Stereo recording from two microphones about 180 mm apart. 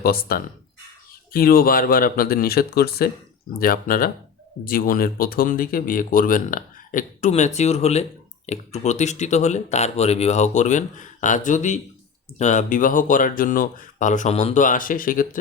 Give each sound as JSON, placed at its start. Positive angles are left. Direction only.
{"t": 0.0, "sound": "speech", "side_deg": 55}